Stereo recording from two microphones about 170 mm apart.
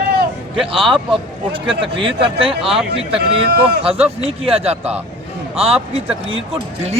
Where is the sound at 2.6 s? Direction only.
Centre (ahead or behind).